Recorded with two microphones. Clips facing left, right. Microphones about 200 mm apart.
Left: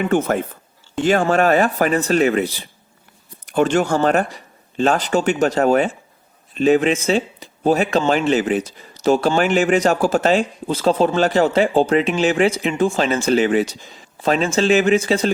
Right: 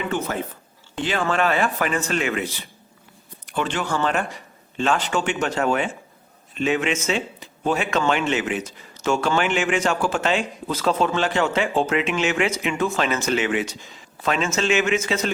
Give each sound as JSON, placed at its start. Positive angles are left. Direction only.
{"t": 0.0, "sound": "speech", "side_deg": 50}